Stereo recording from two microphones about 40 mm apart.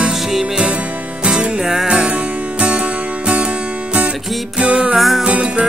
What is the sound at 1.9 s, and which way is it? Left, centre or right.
Music, right.